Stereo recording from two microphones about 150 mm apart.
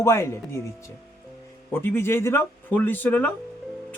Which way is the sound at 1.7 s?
15° left (ahead or behind).